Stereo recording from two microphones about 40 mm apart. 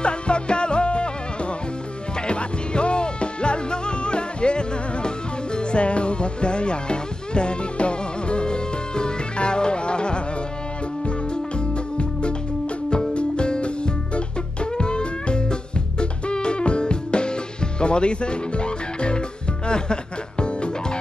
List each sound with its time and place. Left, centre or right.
0.0 s music: left
11.7 s music: left